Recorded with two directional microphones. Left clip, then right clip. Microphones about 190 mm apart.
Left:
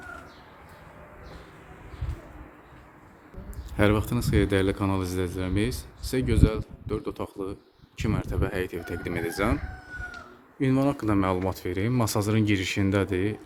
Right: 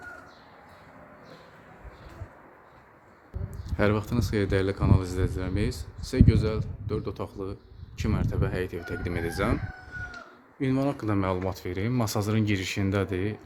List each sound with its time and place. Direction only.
3.7 s speech: 5° left (ahead or behind)
10.6 s speech: 15° left (ahead or behind)